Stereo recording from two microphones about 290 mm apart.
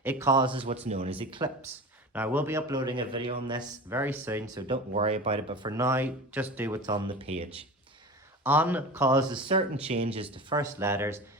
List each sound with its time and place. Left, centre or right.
0.0 s speech: centre
2.1 s speech: centre
8.4 s speech: centre